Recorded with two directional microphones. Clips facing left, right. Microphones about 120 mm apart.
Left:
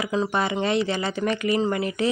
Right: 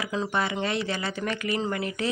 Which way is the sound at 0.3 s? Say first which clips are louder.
Left 4 dB; 20° left (ahead or behind).